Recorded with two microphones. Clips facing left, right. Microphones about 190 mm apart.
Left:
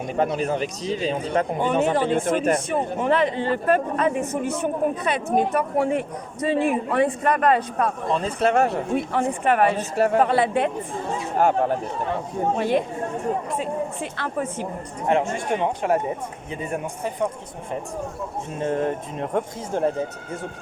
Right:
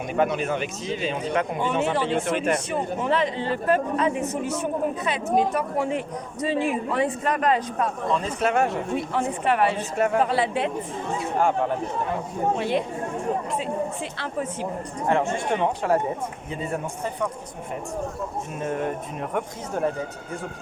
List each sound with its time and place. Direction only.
0.1 s a man's voice: 35° left (ahead or behind); by 7.9 s 55° left (ahead or behind)
8.2 s speech: 35° left (ahead or behind)
9.1 s speech: 50° left (ahead or behind)
9.9 s speech: 35° left (ahead or behind)
10.2 s speech: 55° left (ahead or behind)
11.3 s speech: 40° left (ahead or behind)
15.0 s speech: 20° left (ahead or behind)
18.6 s speech: 30° left (ahead or behind)